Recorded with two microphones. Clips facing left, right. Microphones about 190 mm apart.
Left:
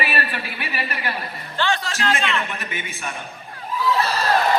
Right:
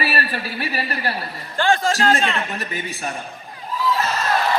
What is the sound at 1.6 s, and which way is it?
A man's voice, 50° right (ahead or behind).